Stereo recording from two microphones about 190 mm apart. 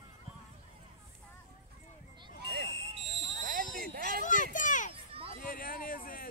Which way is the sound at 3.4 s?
45° right (ahead or behind).